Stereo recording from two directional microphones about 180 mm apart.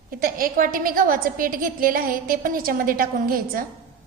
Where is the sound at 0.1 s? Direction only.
55° right (ahead or behind).